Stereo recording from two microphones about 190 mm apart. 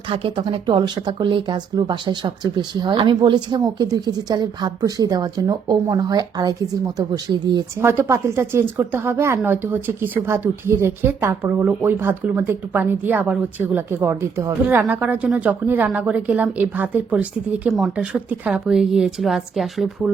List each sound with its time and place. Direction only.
0.1 s speech: 30° right (ahead or behind); by 19.9 s centre (ahead or behind)